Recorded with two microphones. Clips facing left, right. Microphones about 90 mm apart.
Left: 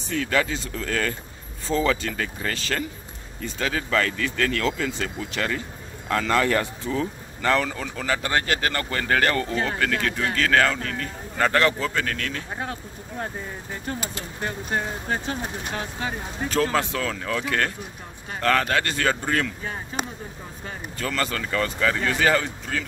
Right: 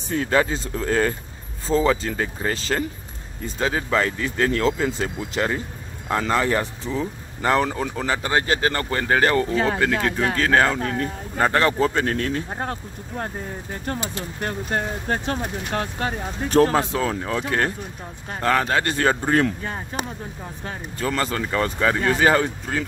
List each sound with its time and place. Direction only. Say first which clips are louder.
0.1 s speech: right 3 dB; 25° right (ahead or behind)
15.0 s speech: right 3 dB; 55° right (ahead or behind)
16.7 s speech: right 3 dB; 30° right (ahead or behind)
21.2 s speech: right 1 dB; 25° right (ahead or behind)